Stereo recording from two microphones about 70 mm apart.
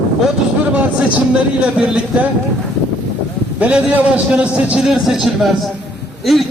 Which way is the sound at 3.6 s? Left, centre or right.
Centre.